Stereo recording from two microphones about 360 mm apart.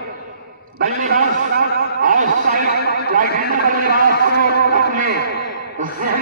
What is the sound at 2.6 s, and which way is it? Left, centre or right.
Speech, left.